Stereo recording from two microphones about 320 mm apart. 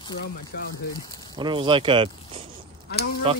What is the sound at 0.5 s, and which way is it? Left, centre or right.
Speech, left.